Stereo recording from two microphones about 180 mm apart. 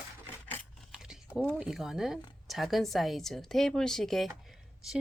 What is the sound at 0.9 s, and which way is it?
Speech, 5° right (ahead or behind).